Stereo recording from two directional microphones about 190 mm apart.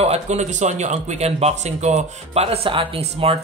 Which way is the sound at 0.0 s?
35° right (ahead or behind).